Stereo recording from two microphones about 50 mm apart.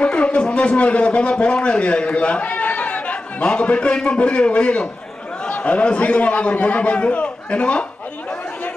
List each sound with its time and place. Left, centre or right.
0.0 s a man's voice: left